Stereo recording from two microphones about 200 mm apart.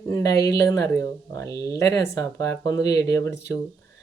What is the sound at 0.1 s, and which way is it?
Speech, 20° left (ahead or behind).